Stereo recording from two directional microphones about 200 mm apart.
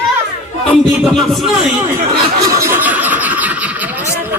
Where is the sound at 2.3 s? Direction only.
15° right (ahead or behind).